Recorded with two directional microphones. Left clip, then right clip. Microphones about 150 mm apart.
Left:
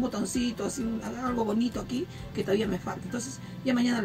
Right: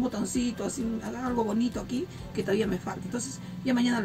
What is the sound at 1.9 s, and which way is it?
Speech, 10° right (ahead or behind).